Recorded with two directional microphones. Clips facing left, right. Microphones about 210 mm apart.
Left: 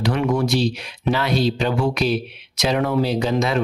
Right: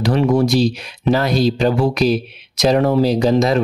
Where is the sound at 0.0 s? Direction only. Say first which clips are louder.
Right 5 dB; 35° right (ahead or behind).